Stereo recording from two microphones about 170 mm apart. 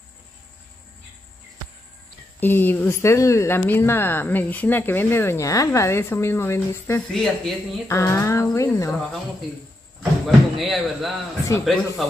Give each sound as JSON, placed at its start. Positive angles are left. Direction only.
{"t": 2.4, "sound": "a woman's voice", "side_deg": 10}
{"t": 7.1, "sound": "speech", "side_deg": 0}
{"t": 7.9, "sound": "a woman's voice", "side_deg": 15}
{"t": 10.2, "sound": "speech", "side_deg": 0}